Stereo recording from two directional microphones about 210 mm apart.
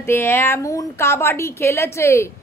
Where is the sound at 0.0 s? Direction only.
10° left (ahead or behind).